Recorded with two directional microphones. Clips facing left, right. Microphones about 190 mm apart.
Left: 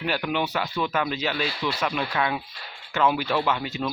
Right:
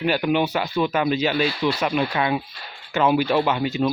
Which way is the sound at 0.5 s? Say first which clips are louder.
Right 4 dB; 10° right (ahead or behind).